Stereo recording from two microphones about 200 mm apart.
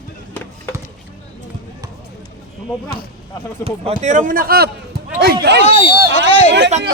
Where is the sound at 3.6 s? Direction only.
35° right (ahead or behind).